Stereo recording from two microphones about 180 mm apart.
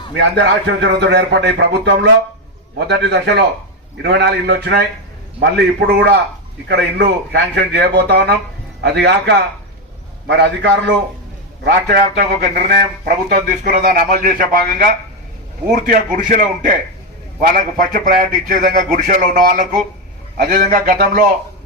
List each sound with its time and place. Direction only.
0.2 s a man's voice: 75° right (ahead or behind); by 21.2 s 50° right (ahead or behind)